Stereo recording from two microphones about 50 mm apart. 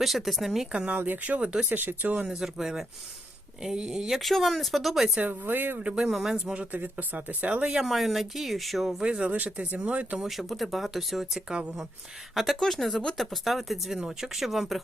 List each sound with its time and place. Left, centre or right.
0.0 s speech: centre
0.7 s speech: centre
0.9 s speech: right
2.1 s speech: centre
4.2 s speech: centre
5.3 s speech: right
6.0 s speech: centre
6.3 s speech: centre
6.7 s speech: right
7.6 s speech: centre
7.9 s speech: centre
9.3 s speech: right
10.2 s speech: centre